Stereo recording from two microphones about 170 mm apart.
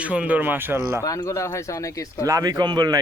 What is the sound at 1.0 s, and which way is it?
Speech, 20° left (ahead or behind).